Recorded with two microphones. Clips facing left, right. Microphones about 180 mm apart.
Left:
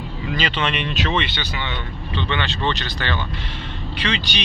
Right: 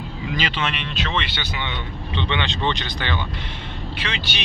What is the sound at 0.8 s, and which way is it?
Speech, 15° left (ahead or behind).